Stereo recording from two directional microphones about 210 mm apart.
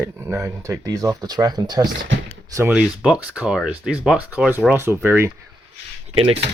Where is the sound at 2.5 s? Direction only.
5° right (ahead or behind).